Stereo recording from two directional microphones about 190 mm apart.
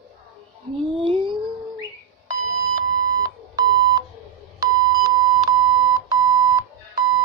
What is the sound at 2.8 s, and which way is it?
Beep, 20° right (ahead or behind).